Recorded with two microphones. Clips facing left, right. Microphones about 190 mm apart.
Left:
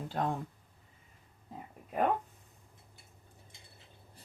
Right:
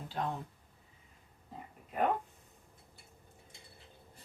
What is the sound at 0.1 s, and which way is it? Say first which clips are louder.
Speech: left 3 dB; 45° left (ahead or behind).